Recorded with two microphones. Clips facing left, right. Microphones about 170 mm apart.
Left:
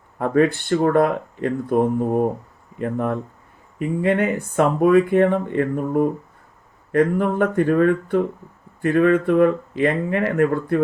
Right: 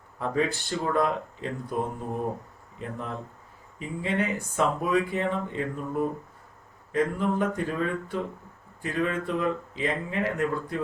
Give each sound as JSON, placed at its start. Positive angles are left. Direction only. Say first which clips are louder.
{"t": 0.2, "sound": "speech", "louder": "left 9 dB", "side_deg": 60}